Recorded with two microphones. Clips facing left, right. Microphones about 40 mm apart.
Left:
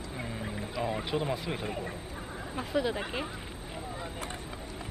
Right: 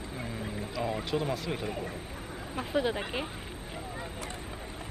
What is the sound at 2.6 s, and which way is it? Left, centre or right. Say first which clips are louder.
Speech: right 1 dB; centre.